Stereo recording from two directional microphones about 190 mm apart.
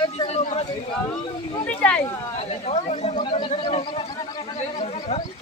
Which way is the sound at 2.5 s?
35° left (ahead or behind).